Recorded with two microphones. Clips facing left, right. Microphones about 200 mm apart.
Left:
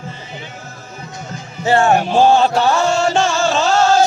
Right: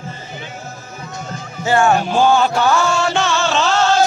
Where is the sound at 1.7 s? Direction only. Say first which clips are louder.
Left 1 dB; 35° left (ahead or behind).